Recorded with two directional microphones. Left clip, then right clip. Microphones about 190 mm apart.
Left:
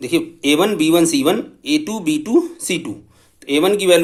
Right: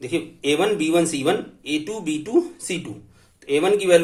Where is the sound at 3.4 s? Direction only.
45° left (ahead or behind).